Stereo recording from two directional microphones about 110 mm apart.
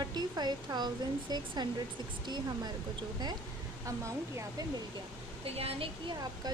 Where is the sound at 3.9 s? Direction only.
30° right (ahead or behind).